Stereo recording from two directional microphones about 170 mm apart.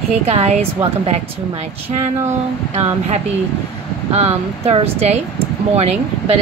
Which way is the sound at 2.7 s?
40° right (ahead or behind).